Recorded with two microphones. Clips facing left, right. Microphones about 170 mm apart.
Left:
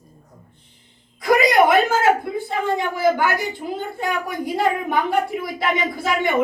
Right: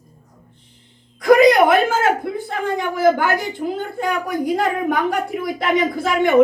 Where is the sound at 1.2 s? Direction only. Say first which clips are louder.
Right 4 dB; 50° right (ahead or behind).